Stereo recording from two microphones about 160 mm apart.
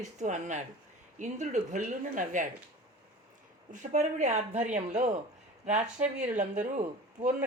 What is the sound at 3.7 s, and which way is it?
A woman's voice, 50° right (ahead or behind).